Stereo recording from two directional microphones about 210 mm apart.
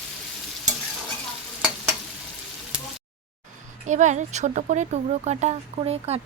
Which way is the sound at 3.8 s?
35° right (ahead or behind).